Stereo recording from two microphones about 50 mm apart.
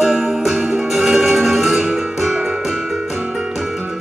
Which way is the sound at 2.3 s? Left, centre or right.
Centre.